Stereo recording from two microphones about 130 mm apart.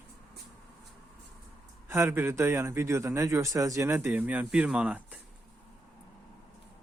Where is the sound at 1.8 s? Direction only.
20° right (ahead or behind).